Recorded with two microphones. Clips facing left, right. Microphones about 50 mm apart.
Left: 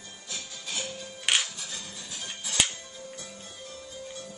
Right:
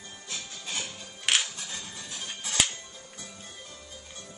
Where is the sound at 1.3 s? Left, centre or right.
Centre.